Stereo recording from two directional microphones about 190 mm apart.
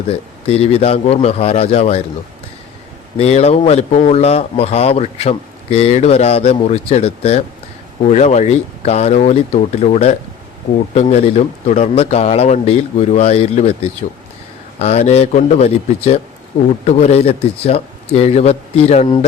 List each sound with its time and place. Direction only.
0.4 s speech: 30° left (ahead or behind)
3.2 s speech: 35° left (ahead or behind)
14.8 s speech: 35° left (ahead or behind)